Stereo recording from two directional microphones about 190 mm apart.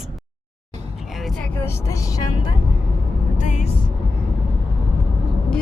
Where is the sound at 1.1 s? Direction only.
Centre (ahead or behind); by 2.6 s 20° left (ahead or behind).